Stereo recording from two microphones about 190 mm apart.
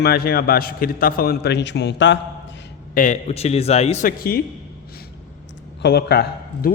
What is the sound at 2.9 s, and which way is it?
A man's voice, 40° left (ahead or behind).